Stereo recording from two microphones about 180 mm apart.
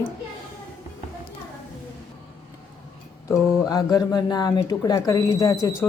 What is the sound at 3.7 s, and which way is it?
A woman's voice, 20° left (ahead or behind).